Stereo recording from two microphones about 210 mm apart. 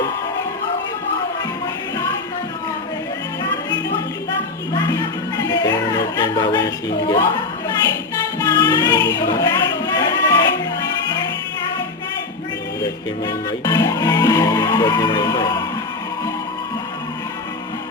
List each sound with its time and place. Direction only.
4.7 s music: 15° left (ahead or behind)
12.8 s speech: 20° left (ahead or behind)